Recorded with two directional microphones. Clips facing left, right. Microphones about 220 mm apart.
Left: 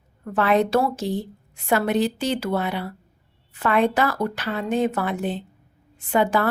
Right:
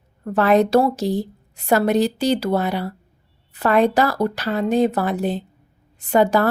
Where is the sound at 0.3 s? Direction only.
40° right (ahead or behind).